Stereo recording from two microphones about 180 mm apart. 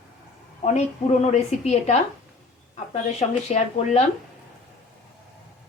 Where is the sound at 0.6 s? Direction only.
40° left (ahead or behind).